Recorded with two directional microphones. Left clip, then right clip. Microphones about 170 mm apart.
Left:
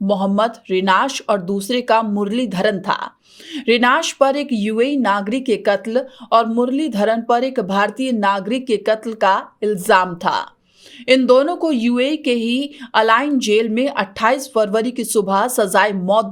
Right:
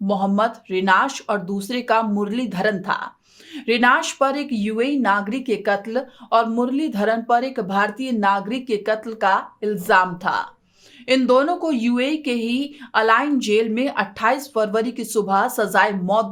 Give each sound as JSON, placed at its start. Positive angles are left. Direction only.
{"t": 0.1, "sound": "speech", "side_deg": 35}